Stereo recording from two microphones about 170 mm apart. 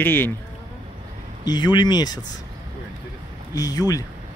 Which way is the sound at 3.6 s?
20° left (ahead or behind).